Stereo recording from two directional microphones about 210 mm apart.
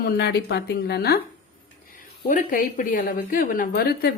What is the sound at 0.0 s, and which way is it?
Speech, 45° left (ahead or behind).